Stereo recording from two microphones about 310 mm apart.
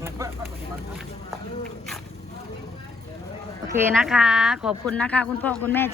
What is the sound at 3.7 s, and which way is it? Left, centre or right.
Speech, centre.